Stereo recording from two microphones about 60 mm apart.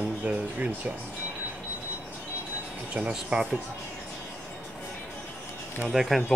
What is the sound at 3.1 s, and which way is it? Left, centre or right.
Speech, centre.